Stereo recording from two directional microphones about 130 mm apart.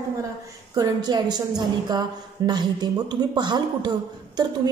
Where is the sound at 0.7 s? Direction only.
30° right (ahead or behind).